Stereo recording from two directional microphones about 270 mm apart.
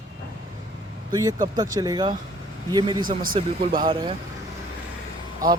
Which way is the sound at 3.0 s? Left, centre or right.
Right.